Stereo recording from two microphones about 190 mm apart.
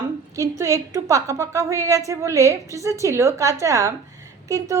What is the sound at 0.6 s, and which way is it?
A woman's voice, 15° right (ahead or behind).